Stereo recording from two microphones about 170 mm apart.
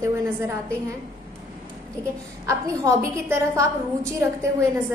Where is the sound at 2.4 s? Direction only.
20° right (ahead or behind).